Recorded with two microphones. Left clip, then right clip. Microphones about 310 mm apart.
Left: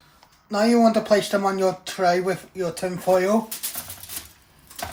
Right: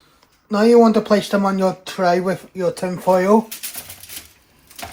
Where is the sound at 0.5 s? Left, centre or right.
Centre.